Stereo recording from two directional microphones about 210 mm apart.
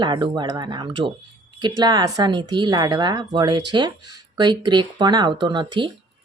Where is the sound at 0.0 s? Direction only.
20° right (ahead or behind).